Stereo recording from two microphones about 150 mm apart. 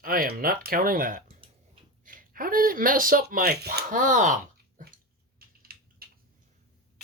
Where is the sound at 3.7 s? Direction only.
60° right (ahead or behind).